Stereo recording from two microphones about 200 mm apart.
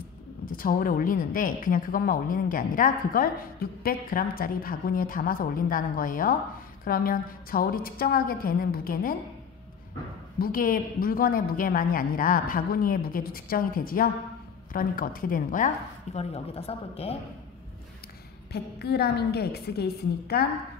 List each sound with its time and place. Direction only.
0.5 s a woman's voice: 45° left (ahead or behind)
10.4 s a woman's voice: 45° left (ahead or behind)
18.5 s a woman's voice: 55° left (ahead or behind)